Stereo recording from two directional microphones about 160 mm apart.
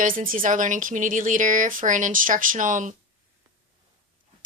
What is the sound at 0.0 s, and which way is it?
A woman's voice, 60° right (ahead or behind).